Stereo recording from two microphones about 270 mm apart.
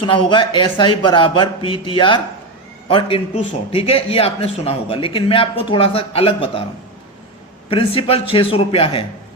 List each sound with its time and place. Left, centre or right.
0.1 s a man's voice: centre
7.7 s a man's voice: centre